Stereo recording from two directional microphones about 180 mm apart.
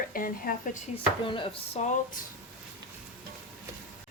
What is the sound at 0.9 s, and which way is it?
Speech, 30° left (ahead or behind).